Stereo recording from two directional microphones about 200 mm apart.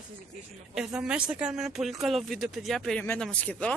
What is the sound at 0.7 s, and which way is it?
Speech, 5° right (ahead or behind).